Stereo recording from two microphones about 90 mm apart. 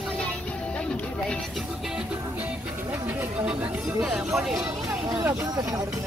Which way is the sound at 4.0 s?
5° right (ahead or behind).